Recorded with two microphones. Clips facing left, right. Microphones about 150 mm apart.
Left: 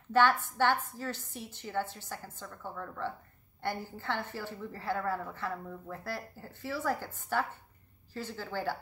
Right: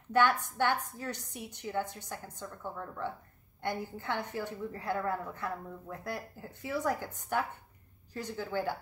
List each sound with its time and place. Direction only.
0.2 s a woman's voice: 15° right (ahead or behind)